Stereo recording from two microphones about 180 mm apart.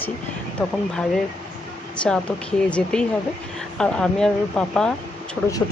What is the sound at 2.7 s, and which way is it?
Speech, 5° left (ahead or behind).